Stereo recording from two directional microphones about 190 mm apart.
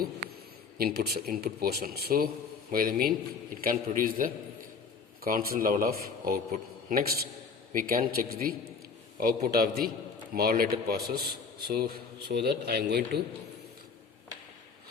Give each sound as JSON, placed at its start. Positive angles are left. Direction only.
{"t": 0.8, "sound": "a man's voice", "side_deg": -55}
{"t": 7.7, "sound": "a man's voice", "side_deg": -50}